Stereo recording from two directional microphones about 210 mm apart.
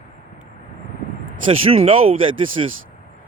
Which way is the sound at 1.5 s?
30° right (ahead or behind).